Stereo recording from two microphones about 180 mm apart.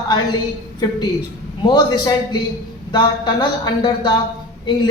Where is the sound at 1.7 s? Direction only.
25° left (ahead or behind).